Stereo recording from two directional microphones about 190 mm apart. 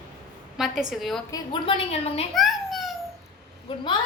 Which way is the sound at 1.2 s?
20° left (ahead or behind).